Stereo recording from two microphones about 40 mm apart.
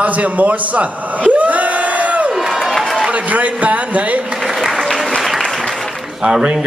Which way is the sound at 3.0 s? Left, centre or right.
Right.